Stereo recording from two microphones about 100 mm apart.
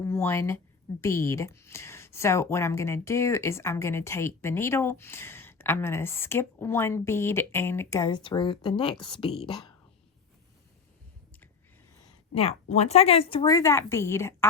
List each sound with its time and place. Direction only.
0.0 s a woman's voice: 25° left (ahead or behind)
8.1 s speech: 50° left (ahead or behind)
12.3 s speech: 80° left
13.4 s speech: 35° left (ahead or behind)